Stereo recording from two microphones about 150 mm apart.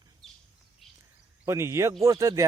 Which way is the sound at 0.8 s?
Centre (ahead or behind).